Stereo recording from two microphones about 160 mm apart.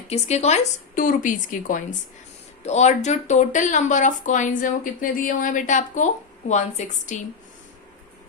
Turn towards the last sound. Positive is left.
turn(degrees=50)  # may be behind; listen again after turning